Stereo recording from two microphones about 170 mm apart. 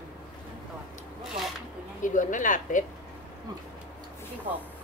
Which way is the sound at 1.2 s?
Centre (ahead or behind).